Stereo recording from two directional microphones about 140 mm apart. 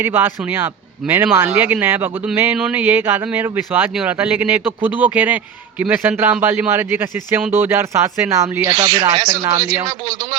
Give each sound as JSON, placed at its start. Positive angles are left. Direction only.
{"t": 0.0, "sound": "a man's voice", "side_deg": -15}